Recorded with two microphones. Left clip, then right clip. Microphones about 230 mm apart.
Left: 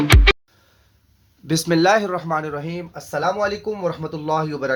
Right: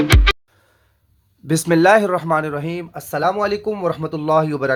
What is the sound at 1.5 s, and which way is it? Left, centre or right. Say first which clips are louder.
Speech: right 3 dB; right.